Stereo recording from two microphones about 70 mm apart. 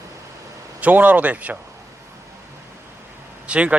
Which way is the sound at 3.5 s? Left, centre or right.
Centre.